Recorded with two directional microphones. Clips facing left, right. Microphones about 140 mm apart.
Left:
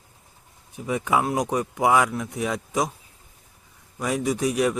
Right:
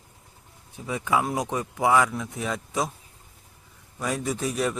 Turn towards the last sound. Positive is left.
turn(degrees=10)  # may be behind; listen again after turning